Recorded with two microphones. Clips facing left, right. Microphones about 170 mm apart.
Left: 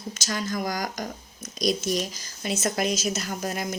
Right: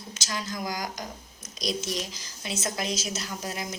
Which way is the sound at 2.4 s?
55° left (ahead or behind).